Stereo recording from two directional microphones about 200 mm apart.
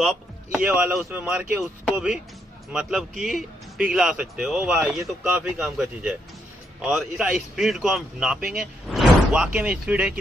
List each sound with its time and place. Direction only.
0.0 s speech: centre (ahead or behind)